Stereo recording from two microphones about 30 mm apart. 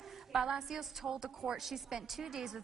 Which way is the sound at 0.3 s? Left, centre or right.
Right.